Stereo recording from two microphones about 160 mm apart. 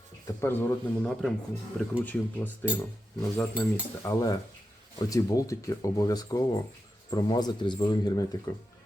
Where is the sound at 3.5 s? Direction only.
5° right (ahead or behind).